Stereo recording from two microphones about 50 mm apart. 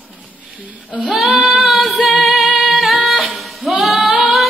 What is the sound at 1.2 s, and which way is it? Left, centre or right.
Female singing, centre.